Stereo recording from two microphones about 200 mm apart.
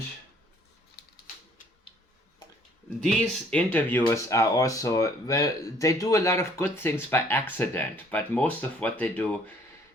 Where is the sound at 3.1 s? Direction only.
5° left (ahead or behind).